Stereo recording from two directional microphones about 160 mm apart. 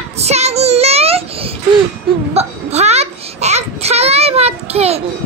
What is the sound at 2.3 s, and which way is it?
Hiccup, 40° right (ahead or behind).